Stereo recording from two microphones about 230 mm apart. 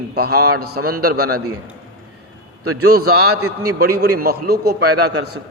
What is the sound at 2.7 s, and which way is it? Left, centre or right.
A man's voice, right.